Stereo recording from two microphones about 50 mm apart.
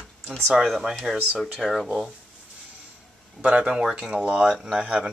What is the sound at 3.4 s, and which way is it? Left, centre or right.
Speech, right.